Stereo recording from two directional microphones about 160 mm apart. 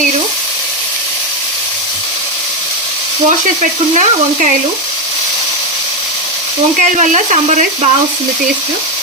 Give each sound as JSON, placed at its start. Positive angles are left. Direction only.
{"t": 3.2, "sound": "speech", "side_deg": -50}
{"t": 6.9, "sound": "speech", "side_deg": -50}